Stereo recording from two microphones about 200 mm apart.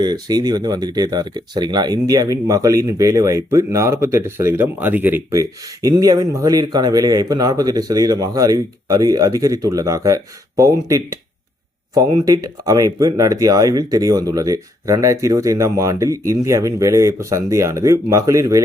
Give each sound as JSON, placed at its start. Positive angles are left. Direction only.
{"t": 0.0, "sound": "speech", "side_deg": -20}